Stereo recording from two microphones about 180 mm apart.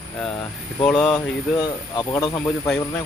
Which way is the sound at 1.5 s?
20° left (ahead or behind).